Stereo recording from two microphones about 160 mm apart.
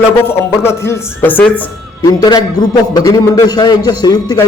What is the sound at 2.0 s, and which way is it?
A man's voice, 25° left (ahead or behind).